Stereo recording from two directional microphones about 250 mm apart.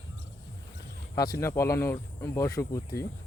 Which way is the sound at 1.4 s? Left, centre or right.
Centre.